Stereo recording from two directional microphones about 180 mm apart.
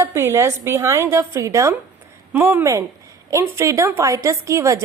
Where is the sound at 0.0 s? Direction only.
15° right (ahead or behind).